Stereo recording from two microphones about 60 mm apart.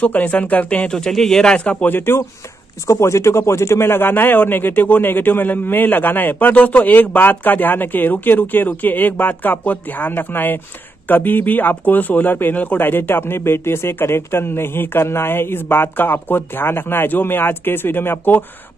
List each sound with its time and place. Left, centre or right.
0.0 s speech: left
0.9 s speech: centre
1.9 s speech: left
2.9 s speech: left